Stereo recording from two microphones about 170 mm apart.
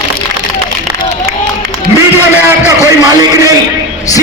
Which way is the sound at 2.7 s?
20° right (ahead or behind).